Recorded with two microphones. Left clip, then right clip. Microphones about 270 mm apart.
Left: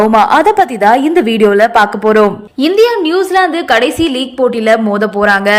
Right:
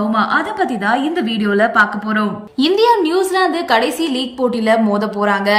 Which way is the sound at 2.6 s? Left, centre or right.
Centre.